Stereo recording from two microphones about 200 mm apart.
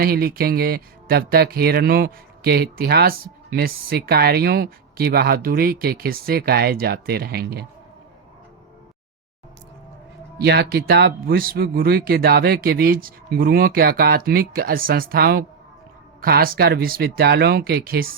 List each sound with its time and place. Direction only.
0.0 s speech: 50° right (ahead or behind)
10.4 s speech: 55° right (ahead or behind)